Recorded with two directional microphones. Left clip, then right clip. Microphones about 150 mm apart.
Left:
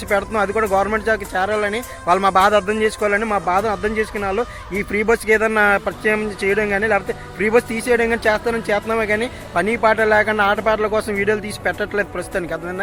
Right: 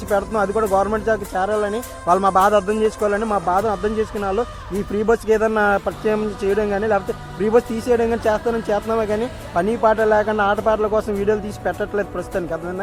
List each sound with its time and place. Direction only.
0.2 s speech: centre (ahead or behind)
3.3 s speech: 25° left (ahead or behind)
3.8 s speech: centre (ahead or behind)